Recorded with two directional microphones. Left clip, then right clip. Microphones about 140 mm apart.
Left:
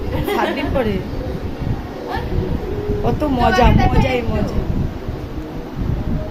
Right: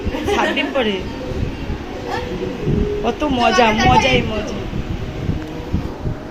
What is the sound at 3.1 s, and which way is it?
A woman's voice, centre (ahead or behind).